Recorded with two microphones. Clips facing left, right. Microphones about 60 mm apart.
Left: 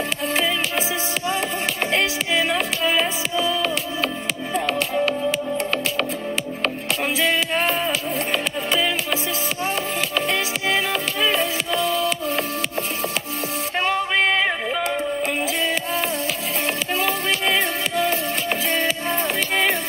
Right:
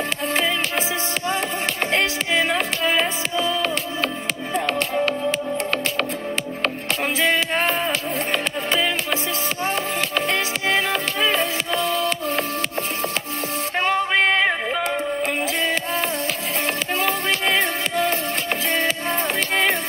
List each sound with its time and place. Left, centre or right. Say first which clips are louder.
0.3 s music: even; right
7.2 s music: right 1 dB; right
11.9 s music: even; right
13.7 s music: right 1 dB; right